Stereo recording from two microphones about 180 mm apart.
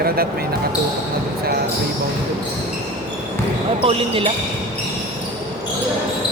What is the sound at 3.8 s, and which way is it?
Speech, 30° right (ahead or behind).